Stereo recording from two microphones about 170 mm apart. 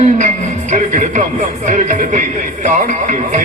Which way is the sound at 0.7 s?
45° right (ahead or behind).